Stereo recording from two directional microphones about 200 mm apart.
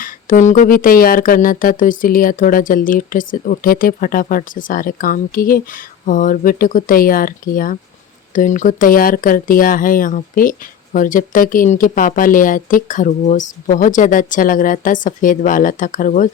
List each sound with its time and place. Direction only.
0.0 s speech: 40° left (ahead or behind)